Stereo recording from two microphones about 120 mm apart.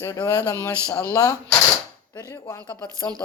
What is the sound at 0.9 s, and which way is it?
Speech, 25° left (ahead or behind).